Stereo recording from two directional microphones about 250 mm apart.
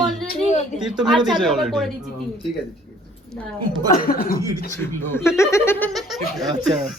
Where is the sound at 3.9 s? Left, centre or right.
Left.